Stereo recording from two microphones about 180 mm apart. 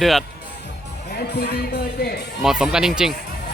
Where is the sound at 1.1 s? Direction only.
60° left (ahead or behind).